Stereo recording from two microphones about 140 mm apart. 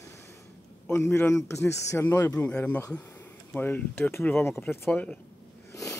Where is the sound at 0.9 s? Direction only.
20° left (ahead or behind).